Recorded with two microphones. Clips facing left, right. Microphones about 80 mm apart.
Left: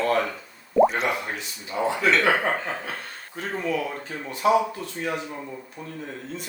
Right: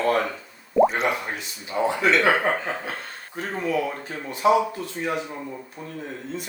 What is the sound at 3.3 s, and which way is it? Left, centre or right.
Speech, centre.